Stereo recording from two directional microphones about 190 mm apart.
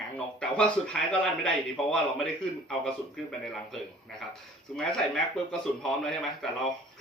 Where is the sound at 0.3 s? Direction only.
5° left (ahead or behind).